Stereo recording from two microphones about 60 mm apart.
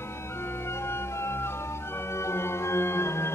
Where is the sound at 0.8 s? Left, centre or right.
Left.